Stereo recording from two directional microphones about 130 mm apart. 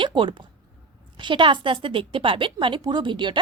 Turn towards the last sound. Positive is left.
turn(degrees=-40)  # may be behind; listen again after turning